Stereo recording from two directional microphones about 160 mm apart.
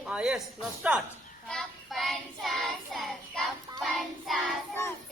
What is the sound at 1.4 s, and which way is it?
Child singing, centre (ahead or behind).